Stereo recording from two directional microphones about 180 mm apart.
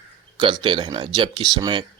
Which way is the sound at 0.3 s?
30° right (ahead or behind).